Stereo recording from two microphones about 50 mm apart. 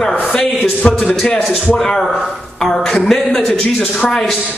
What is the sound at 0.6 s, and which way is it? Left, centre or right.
Speech, left.